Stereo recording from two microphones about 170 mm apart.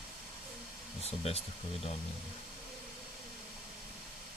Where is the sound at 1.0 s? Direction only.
35° left (ahead or behind).